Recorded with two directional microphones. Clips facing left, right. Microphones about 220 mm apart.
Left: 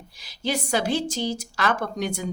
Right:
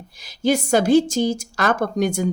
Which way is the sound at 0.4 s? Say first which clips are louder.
Right 8 dB; 45° right (ahead or behind).